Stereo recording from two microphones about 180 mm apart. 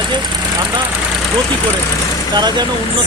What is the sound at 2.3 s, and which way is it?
Speech, 25° right (ahead or behind).